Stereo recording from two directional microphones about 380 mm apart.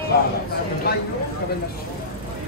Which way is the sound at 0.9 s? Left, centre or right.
Left.